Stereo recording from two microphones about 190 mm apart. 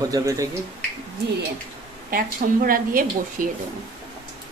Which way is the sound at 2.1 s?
50° right (ahead or behind).